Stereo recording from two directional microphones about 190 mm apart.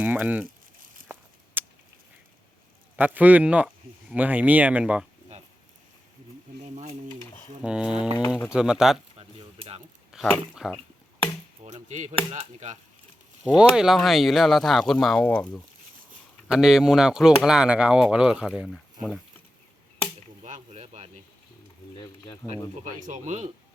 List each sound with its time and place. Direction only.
0.0 s speech: 10° right (ahead or behind)
1.6 s a sound: 10° right (ahead or behind)
2.9 s speech: 10° right (ahead or behind)
7.6 s speech: 5° right (ahead or behind)
9.1 s a sound: 30° right (ahead or behind)
10.1 s a sound: centre (ahead or behind)
10.5 s speech: centre (ahead or behind)
11.6 s chop: 40° right (ahead or behind)
12.3 s speech: 40° right (ahead or behind)
13.4 s speech: 5° right (ahead or behind)
20.4 s a sound: 35° right (ahead or behind)
22.4 s speech: centre (ahead or behind)
22.8 s speech: 40° right (ahead or behind)